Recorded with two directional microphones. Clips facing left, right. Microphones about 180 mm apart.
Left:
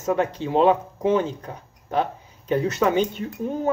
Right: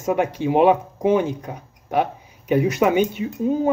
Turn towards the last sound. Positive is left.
turn(degrees=-5)  # may be behind; listen again after turning